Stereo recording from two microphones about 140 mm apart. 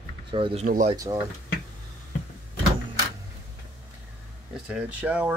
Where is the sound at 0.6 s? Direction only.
75° right (ahead or behind).